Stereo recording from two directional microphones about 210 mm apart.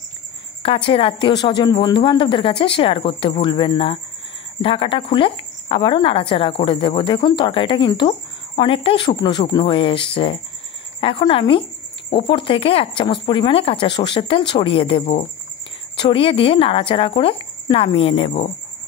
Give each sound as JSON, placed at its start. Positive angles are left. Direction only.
{"t": 0.6, "sound": "speech", "side_deg": 25}